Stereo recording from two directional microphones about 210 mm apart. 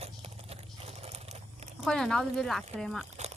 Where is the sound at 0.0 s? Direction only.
30° right (ahead or behind).